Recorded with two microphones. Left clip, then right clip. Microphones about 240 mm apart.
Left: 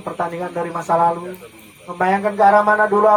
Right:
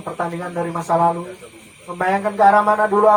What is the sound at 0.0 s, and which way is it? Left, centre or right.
A man's voice, left.